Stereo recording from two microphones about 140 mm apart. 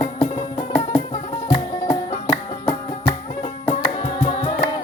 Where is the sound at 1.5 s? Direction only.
35° left (ahead or behind).